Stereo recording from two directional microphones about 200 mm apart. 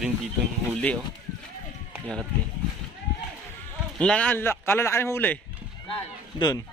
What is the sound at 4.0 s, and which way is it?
A man's voice, 5° left (ahead or behind).